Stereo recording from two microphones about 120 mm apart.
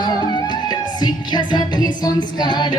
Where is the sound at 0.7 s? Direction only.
35° left (ahead or behind).